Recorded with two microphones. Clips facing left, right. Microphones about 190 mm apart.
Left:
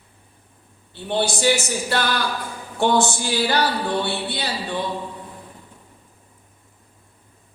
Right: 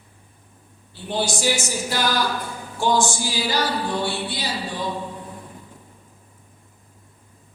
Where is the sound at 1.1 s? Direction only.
60° left (ahead or behind).